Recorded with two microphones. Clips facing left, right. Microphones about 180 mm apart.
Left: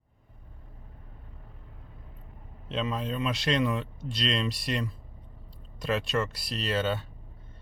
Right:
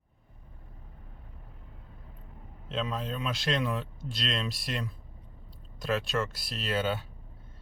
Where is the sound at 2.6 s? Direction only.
Centre (ahead or behind).